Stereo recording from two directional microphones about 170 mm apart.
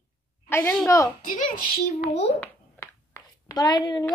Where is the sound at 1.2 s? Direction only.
50° left (ahead or behind).